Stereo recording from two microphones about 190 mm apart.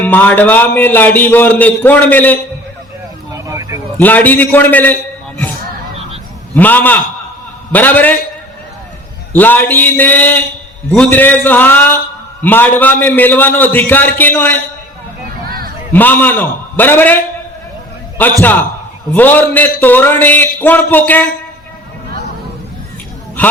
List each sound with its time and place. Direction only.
0.0 s a man's voice: 10° left (ahead or behind)
3.3 s vehicle: 15° right (ahead or behind)
3.9 s a man's voice: 10° left (ahead or behind)
6.5 s a man's voice: 10° left (ahead or behind)
9.3 s a man's voice: 10° left (ahead or behind)
15.4 s a sound: 50° right (ahead or behind)
15.9 s a man's voice: 10° left (ahead or behind)